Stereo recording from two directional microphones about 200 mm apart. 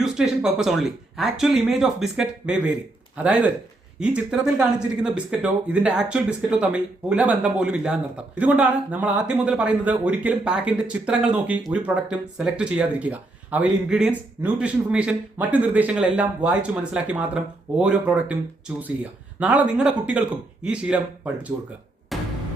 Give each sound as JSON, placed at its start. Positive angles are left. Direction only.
{"t": 0.0, "sound": "speech", "side_deg": 0}
{"t": 19.4, "sound": "speech", "side_deg": -5}
{"t": 22.1, "sound": "music", "side_deg": 0}